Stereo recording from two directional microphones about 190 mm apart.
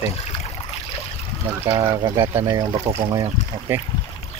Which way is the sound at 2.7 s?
30° right (ahead or behind).